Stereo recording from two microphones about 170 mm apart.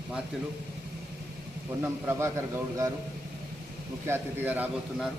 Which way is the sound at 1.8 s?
15° right (ahead or behind).